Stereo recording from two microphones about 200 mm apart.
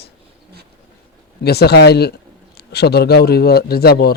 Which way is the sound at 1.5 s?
55° left (ahead or behind).